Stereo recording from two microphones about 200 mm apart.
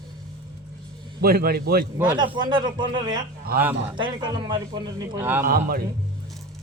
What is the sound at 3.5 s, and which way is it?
Speech, 50° right (ahead or behind).